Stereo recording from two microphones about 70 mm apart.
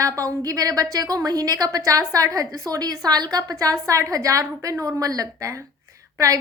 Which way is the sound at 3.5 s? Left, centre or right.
Right.